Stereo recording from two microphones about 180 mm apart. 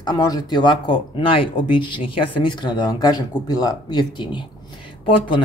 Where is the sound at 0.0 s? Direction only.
20° left (ahead or behind).